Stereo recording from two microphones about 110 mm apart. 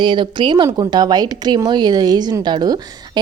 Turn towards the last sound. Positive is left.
turn(degrees=-40)  # may be behind; listen again after turning